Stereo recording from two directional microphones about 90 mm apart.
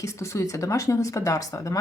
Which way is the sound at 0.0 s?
35° left (ahead or behind).